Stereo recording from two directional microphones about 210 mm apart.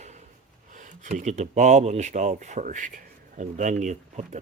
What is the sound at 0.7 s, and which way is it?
Speech, 35° right (ahead or behind).